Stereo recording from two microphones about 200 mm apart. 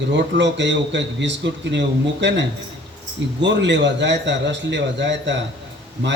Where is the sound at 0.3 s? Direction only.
65° right (ahead or behind).